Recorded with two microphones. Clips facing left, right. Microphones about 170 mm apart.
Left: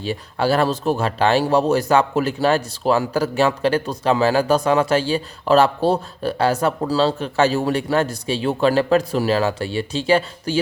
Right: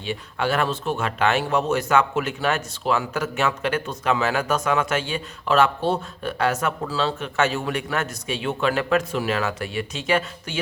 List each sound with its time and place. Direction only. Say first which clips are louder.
0.0 s speech: left 4 dB; 35° left (ahead or behind)